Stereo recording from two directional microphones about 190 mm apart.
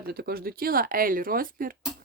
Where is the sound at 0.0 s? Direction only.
55° right (ahead or behind).